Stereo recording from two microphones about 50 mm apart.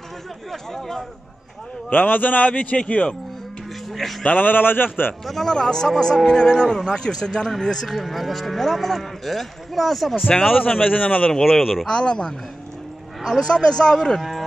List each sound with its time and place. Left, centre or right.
0.5 s cattle: centre
1.9 s a man's voice: left
3.9 s music: centre
4.2 s speech: left
5.2 s speech: centre
7.6 s cattle: centre
10.6 s speech: left
11.4 s cattle: centre
11.9 s a man's voice: centre
13.4 s speech: centre